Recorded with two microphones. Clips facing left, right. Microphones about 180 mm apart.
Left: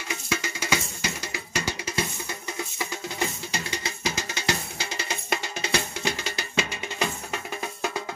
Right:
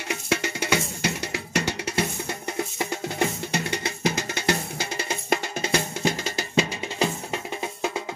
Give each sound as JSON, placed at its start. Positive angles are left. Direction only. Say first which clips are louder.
{"t": 0.1, "sound": "music", "louder": "right 4 dB", "side_deg": -65}